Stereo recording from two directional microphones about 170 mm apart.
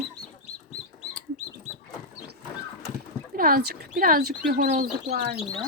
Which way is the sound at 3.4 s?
55° right (ahead or behind).